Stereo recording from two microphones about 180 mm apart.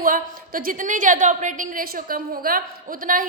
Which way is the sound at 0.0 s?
50° right (ahead or behind).